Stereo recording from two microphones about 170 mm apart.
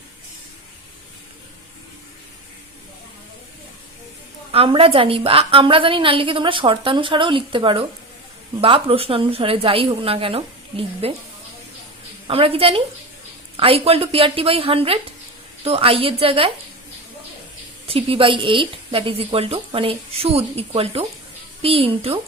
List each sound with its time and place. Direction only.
4.5 s a woman's voice: 35° right (ahead or behind)
12.3 s a woman's voice: 35° right (ahead or behind)
17.8 s a woman's voice: 35° right (ahead or behind)